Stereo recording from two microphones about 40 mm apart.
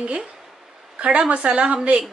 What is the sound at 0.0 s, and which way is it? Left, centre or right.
A woman's voice, right.